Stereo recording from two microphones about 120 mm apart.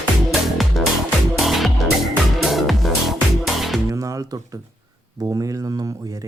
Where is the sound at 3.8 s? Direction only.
25° right (ahead or behind).